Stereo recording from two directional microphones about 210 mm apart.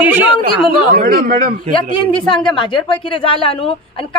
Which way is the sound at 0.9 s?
45° right (ahead or behind).